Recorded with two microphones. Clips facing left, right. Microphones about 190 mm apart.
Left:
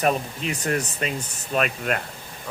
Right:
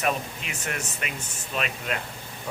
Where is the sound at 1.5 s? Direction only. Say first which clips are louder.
Left 6 dB; 50° left (ahead or behind).